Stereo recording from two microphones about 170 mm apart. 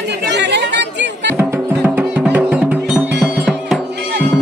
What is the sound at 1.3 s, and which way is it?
Music, 10° right (ahead or behind).